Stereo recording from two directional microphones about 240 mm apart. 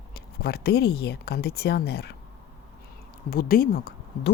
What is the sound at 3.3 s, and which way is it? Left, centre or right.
Speech, left.